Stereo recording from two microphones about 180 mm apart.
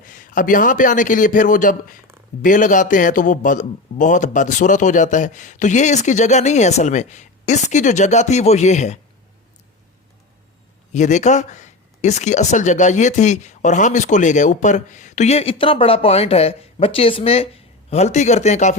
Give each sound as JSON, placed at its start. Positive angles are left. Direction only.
{"t": 0.0, "sound": "a man's voice", "side_deg": 45}
{"t": 10.9, "sound": "speech", "side_deg": 40}